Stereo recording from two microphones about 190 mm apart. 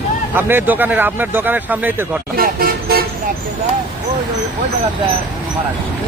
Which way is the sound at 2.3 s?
50° right (ahead or behind).